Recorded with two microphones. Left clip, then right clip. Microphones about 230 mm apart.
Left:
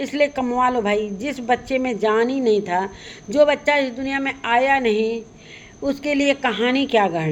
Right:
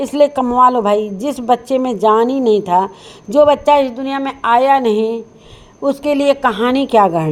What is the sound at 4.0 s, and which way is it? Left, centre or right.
Speech, centre.